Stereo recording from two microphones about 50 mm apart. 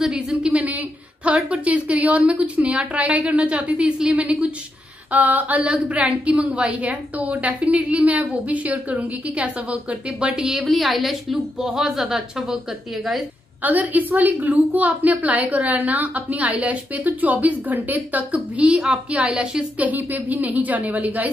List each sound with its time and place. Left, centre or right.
0.0 s a woman's voice: centre
10.4 s a woman's voice: centre
13.6 s a woman's voice: right
18.6 s a woman's voice: right
19.8 s a woman's voice: right